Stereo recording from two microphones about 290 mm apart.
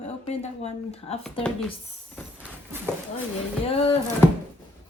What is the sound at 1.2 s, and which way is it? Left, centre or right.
Speech, centre.